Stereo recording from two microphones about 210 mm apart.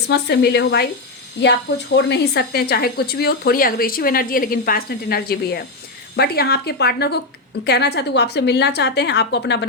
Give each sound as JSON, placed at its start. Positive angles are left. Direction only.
{"t": 0.1, "sound": "speech", "side_deg": 50}
{"t": 2.0, "sound": "speech", "side_deg": 55}